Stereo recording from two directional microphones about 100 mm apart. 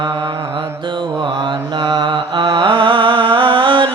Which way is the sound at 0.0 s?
50° right (ahead or behind).